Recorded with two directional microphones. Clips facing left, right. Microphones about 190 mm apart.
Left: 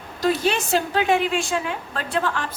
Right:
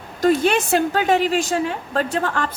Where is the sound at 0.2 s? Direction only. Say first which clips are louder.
Right 4 dB; 55° right (ahead or behind).